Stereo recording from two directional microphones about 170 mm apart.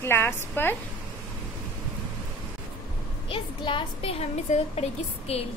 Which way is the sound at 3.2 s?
30° left (ahead or behind).